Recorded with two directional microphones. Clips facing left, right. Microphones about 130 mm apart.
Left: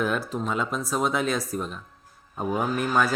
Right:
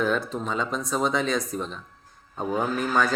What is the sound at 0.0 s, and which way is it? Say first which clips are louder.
A man's voice: right 1 dB; 5° left (ahead or behind).